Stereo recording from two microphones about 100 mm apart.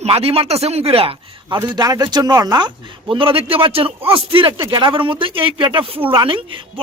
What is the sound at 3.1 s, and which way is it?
Speech, 65° right (ahead or behind).